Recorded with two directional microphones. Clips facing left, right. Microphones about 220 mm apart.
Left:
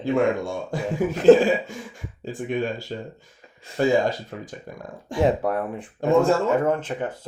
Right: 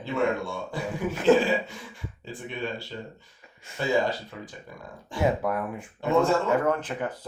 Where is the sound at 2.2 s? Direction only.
45° left (ahead or behind).